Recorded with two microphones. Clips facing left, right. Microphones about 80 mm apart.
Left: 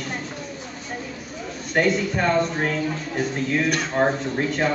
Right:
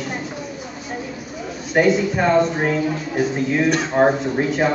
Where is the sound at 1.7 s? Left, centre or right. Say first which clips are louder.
Right 4 dB; centre.